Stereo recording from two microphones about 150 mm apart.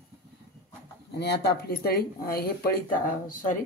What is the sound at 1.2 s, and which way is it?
Speech, 90° left.